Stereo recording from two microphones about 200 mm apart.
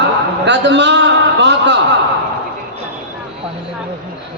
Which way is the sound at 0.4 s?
60° right (ahead or behind).